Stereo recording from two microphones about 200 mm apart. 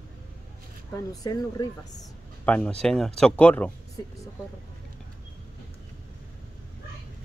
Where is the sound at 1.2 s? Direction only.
20° left (ahead or behind).